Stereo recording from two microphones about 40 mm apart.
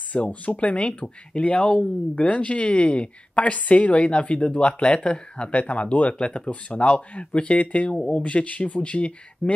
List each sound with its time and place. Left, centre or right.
0.1 s speech: left
6.1 s speech: left